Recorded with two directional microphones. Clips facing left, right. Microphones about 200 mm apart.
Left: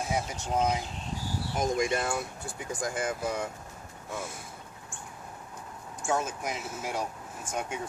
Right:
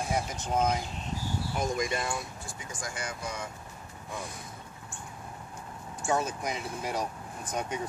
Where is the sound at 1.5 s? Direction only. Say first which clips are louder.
Left 4 dB; 55° left (ahead or behind).